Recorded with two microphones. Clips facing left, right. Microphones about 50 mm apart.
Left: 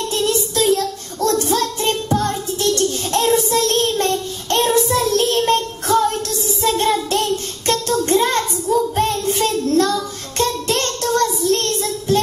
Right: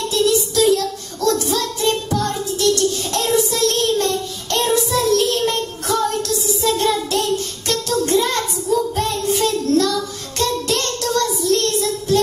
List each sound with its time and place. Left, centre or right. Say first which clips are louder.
0.1 s child singing: right 4 dB; left